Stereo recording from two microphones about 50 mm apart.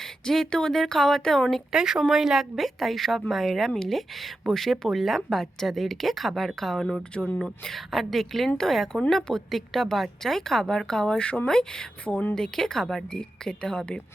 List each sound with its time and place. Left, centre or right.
0.0 s a woman's voice: centre
1.7 s a woman's voice: centre
7.9 s a woman's voice: centre; by 11.4 s left
11.4 s a woman's voice: centre
12.0 s speech: left
12.3 s a woman's voice: centre